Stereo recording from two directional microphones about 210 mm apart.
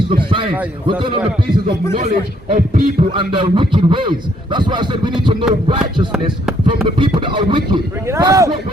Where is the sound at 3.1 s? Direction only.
25° right (ahead or behind).